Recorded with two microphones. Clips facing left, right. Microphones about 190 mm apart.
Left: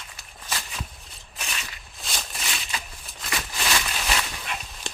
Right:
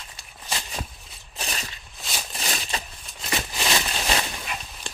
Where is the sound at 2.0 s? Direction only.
5° right (ahead or behind).